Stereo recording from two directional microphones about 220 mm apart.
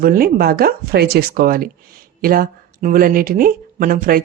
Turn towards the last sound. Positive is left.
turn(degrees=-40)  # may be behind; listen again after turning